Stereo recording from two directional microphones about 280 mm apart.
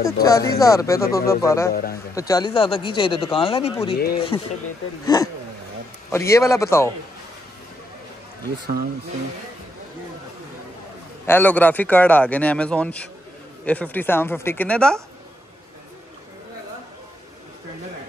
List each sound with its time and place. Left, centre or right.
0.0 s speech: centre
1.7 s a man's voice: left
2.1 s speech: centre
4.3 s speech: centre
11.2 s a man's voice: centre